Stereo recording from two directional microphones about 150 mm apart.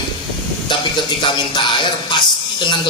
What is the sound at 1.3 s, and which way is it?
Speech, 30° left (ahead or behind).